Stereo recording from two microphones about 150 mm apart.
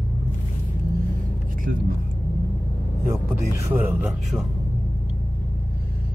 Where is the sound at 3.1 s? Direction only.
15° right (ahead or behind).